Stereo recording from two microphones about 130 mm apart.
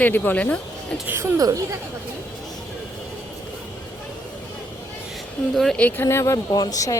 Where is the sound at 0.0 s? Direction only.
15° left (ahead or behind).